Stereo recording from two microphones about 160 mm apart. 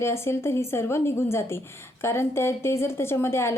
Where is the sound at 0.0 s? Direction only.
15° left (ahead or behind).